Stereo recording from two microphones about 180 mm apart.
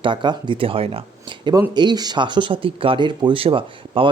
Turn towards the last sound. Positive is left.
turn(degrees=-30)  # may be behind; listen again after turning